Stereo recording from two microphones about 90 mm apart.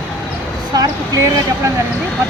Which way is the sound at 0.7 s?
40° right (ahead or behind).